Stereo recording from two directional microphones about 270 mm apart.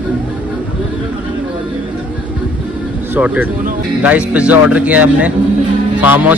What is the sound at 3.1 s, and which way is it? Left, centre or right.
A man's voice, centre.